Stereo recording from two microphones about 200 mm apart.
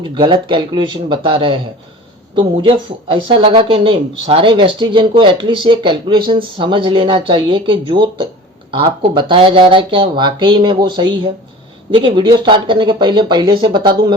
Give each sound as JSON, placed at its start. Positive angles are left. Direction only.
{"t": 0.1, "sound": "speech", "side_deg": -25}